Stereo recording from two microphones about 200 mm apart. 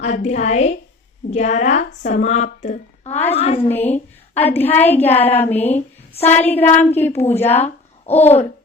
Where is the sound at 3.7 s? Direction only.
10° left (ahead or behind).